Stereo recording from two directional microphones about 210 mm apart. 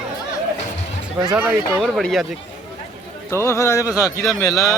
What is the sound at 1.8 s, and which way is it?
Speech, centre (ahead or behind).